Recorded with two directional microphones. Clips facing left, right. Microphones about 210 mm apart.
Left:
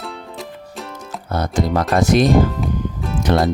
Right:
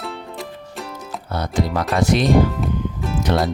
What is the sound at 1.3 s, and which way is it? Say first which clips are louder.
Speech: left 3 dB; 45° left (ahead or behind).